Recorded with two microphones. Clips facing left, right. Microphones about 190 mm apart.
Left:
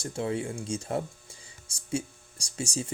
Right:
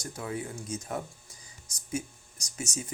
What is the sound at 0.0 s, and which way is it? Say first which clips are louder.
Speech: left 5 dB; 30° left (ahead or behind).